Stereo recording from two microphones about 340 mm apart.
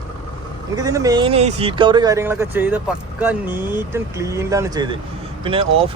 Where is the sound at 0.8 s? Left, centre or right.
Centre.